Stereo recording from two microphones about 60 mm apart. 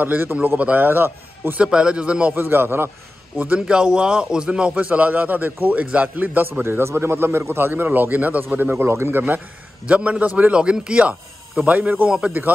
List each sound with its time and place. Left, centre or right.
0.0 s a man's voice: right
0.6 s a man's voice: right
0.8 s a man's voice: right
1.6 s a man's voice: centre
2.3 s a man's voice: right
3.3 s a man's voice: right
9.8 s a man's voice: right